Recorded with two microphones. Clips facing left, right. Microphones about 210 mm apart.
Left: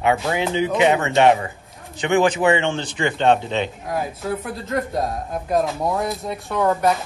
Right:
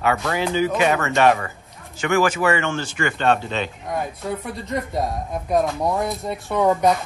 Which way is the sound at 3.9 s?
Centre (ahead or behind).